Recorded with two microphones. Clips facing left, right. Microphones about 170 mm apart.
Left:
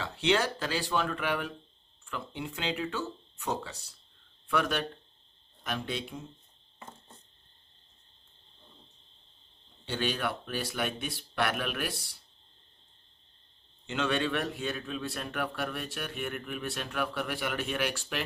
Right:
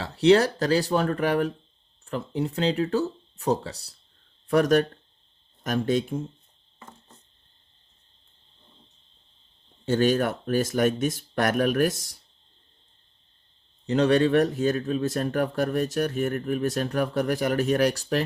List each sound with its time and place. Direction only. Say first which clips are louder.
0.0 s speech: right 10 dB; 35° right (ahead or behind)
9.8 s speech: right 10 dB; 45° right (ahead or behind)
13.8 s speech: right 10 dB; 40° right (ahead or behind)